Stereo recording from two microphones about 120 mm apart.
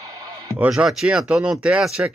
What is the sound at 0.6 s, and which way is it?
Speech, 5° right (ahead or behind).